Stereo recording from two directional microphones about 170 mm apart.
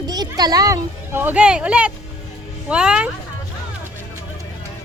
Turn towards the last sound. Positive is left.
turn(degrees=-5)  # may be behind; listen again after turning